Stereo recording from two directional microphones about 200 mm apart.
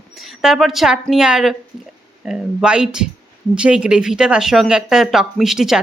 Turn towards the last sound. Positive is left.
turn(degrees=0)  # may be behind; listen again after turning